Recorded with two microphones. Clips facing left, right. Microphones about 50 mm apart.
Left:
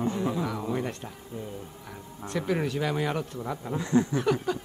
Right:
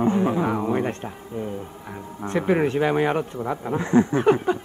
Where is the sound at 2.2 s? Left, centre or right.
Right.